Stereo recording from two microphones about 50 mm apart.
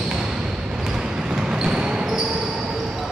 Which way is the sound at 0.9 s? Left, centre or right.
Centre.